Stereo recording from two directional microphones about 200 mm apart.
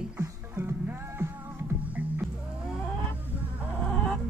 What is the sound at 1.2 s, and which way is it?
Music, 10° right (ahead or behind).